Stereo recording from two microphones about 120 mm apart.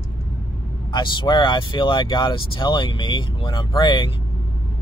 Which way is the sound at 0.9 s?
40° left (ahead or behind).